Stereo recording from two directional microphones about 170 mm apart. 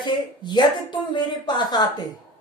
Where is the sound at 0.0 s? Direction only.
25° left (ahead or behind).